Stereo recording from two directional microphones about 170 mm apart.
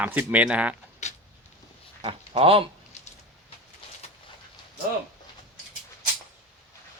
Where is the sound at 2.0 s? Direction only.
30° right (ahead or behind).